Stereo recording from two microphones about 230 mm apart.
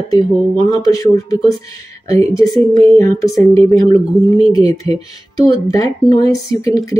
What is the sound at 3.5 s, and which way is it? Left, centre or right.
Speech, centre.